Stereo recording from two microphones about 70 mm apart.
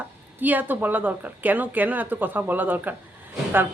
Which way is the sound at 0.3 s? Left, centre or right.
Right.